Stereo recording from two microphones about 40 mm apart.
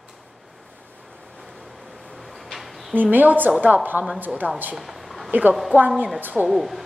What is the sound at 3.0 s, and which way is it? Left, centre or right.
A woman's voice, right.